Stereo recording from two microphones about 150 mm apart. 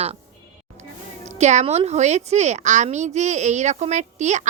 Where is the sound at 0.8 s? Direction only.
50° right (ahead or behind).